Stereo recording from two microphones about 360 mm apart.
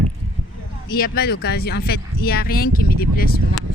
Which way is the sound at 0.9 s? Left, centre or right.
Left.